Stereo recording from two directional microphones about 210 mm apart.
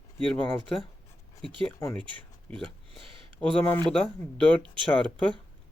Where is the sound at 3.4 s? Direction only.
5° left (ahead or behind).